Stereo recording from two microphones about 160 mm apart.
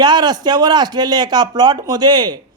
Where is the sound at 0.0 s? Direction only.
25° right (ahead or behind).